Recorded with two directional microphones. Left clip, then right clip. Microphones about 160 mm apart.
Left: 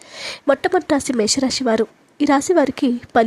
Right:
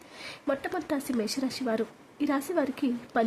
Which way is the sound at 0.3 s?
50° left (ahead or behind).